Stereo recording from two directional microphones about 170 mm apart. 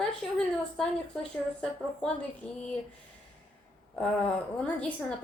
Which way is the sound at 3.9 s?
5° left (ahead or behind).